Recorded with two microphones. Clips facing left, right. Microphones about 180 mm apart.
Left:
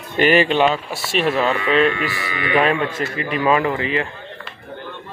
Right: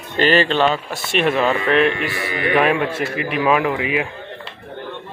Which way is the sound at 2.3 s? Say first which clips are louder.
Right 3 dB; 50° right (ahead or behind).